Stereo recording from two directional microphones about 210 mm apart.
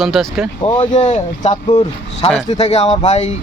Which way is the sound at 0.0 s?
Centre (ahead or behind).